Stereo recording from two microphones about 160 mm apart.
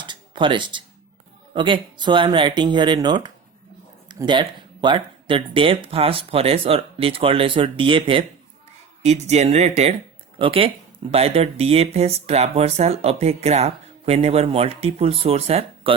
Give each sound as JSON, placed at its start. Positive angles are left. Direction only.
{"t": 0.0, "sound": "a sound", "side_deg": -30}
{"t": 1.5, "sound": "speech", "side_deg": -30}
{"t": 9.0, "sound": "speech", "side_deg": -45}